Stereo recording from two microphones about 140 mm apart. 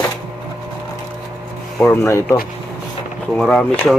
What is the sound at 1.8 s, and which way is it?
Speech, 25° left (ahead or behind).